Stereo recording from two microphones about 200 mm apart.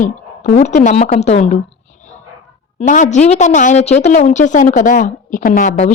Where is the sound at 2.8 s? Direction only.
40° left (ahead or behind).